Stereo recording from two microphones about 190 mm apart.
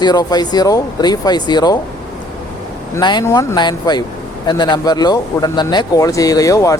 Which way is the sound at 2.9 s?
20° left (ahead or behind).